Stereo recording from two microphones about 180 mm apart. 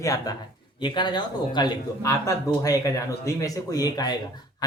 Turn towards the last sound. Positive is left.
turn(degrees=20)  # may be behind; listen again after turning